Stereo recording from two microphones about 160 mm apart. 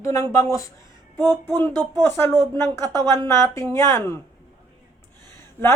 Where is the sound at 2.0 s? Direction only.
15° left (ahead or behind).